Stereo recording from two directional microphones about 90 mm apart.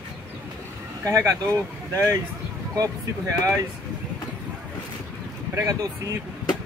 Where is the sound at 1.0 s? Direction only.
35° right (ahead or behind).